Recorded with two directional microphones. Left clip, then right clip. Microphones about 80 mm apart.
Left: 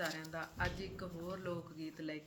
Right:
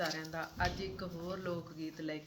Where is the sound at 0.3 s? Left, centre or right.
Right.